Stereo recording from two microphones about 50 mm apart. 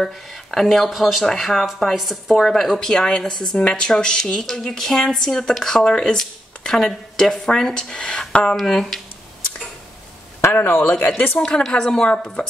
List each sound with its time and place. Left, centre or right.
0.0 s speech: centre
8.5 s speech: centre
10.5 s a man's voice: left
11.3 s speech: centre